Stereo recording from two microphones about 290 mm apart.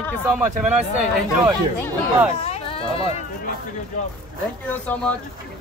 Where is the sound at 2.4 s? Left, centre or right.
Left.